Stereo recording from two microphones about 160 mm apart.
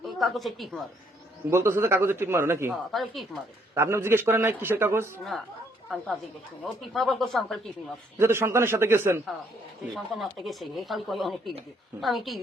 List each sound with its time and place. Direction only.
0.2 s speech: centre (ahead or behind)
1.5 s a man's voice: 15° right (ahead or behind)
2.9 s speech: centre (ahead or behind)
3.8 s a man's voice: 15° right (ahead or behind)
6.9 s speech: centre (ahead or behind)
8.2 s a man's voice: 15° right (ahead or behind)
9.9 s speech: centre (ahead or behind)